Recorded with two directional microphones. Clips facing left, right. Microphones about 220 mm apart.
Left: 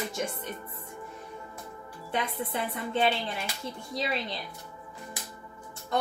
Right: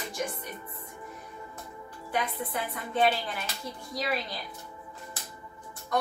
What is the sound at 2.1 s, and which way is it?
Speech, 25° left (ahead or behind).